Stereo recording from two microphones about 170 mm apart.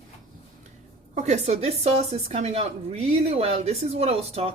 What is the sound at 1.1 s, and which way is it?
Speech, 40° right (ahead or behind).